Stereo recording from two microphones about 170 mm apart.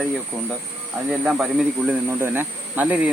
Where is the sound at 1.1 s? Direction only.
5° right (ahead or behind).